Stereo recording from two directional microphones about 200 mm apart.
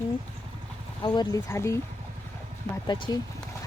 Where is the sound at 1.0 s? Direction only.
20° left (ahead or behind).